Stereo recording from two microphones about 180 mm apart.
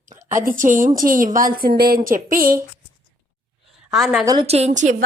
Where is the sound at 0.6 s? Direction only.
45° right (ahead or behind).